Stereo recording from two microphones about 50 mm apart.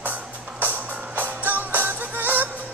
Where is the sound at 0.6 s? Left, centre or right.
Right.